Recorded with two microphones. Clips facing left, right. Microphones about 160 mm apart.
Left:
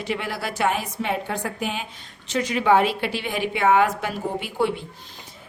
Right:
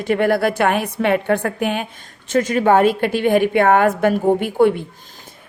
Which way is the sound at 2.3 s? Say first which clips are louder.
Right 5 dB; 50° right (ahead or behind).